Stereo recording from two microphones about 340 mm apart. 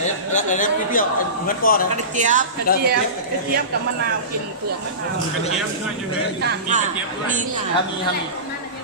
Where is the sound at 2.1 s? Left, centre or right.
Right.